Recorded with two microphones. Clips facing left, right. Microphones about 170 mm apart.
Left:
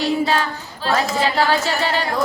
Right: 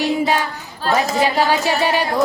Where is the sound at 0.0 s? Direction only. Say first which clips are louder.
Right 1 dB; 15° right (ahead or behind).